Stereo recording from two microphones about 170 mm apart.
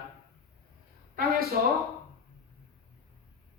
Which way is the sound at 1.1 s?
65° right (ahead or behind).